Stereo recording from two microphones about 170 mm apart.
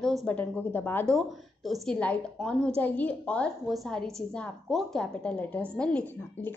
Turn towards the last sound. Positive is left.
turn(degrees=5)  # may be behind; listen again after turning